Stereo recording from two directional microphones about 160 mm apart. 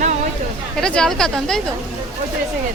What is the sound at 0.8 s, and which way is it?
Speech, 5° left (ahead or behind).